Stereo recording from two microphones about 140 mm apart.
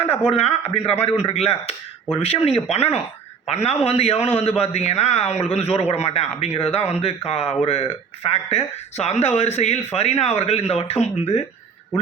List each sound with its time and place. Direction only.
0.0 s a man's voice: 45° left (ahead or behind)